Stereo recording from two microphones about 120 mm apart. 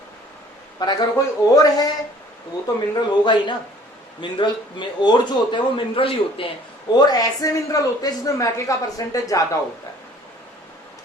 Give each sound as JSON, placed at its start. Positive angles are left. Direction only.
{"t": 0.8, "sound": "a man's voice", "side_deg": 30}
{"t": 6.9, "sound": "a man's voice", "side_deg": 35}